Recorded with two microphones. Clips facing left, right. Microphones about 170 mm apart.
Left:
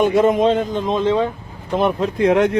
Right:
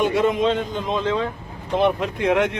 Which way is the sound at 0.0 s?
45° left (ahead or behind).